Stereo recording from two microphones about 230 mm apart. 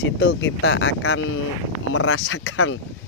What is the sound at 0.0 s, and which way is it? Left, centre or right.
Speech, left.